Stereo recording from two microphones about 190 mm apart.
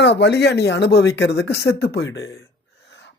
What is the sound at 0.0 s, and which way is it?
Speech, 65° left (ahead or behind).